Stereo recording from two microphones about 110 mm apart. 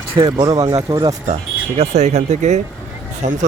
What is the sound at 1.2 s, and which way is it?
Speech, 80° right.